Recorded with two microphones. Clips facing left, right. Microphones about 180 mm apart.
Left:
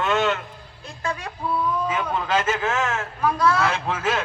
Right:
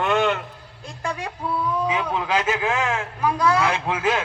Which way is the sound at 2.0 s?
5° right (ahead or behind).